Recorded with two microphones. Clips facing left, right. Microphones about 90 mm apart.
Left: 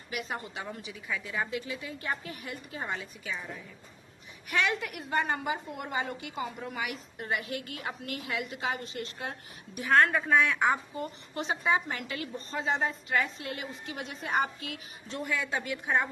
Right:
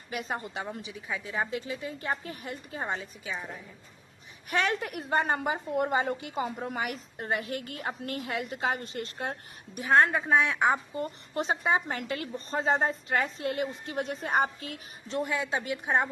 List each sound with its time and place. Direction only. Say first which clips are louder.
0.1 s a woman's voice: right 2 dB; 35° right (ahead or behind)
0.6 s a woman's voice: right 2 dB; 25° right (ahead or behind)
1.3 s a woman's voice: right 3 dB; 35° right (ahead or behind)
4.4 s a woman's voice: right 1 dB; 40° right (ahead or behind)
9.8 s a woman's voice: right 1 dB; 25° right (ahead or behind)
11.0 s a woman's voice: right 3 dB; 40° right (ahead or behind)